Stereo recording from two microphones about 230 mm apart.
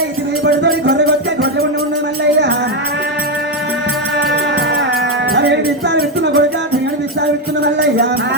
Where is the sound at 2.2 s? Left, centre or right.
Right.